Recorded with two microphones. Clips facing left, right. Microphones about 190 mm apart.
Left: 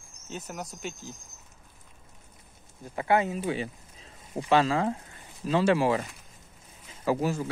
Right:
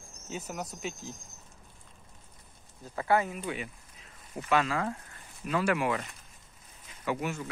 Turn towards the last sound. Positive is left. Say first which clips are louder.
# left 6 dB
turn(degrees=35)  # may be behind; listen again after turning